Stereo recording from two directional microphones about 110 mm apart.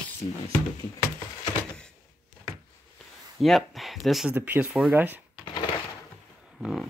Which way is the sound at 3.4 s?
Centre (ahead or behind).